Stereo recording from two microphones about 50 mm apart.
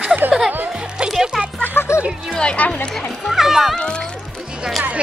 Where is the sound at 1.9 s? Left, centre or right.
Left.